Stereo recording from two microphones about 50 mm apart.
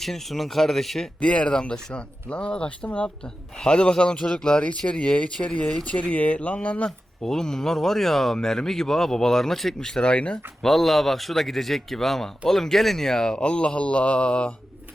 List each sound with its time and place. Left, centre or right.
0.0 s speech: centre
1.2 s speech: left
5.8 s speech: left
7.2 s speech: centre
10.6 s speech: centre; by 14.5 s left